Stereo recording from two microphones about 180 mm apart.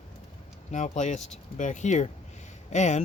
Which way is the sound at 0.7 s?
40° left (ahead or behind).